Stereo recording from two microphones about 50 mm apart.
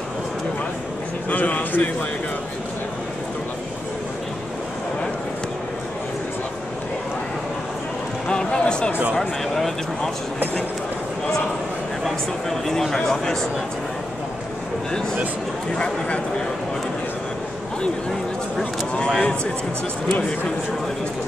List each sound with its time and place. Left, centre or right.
1.3 s speech: left
8.3 s a sound: centre
9.1 s speech: centre
12.0 s speech: centre
15.7 s speech: centre
19.1 s speech: left